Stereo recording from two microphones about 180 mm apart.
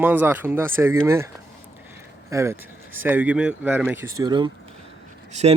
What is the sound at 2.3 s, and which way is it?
Speech, 15° right (ahead or behind).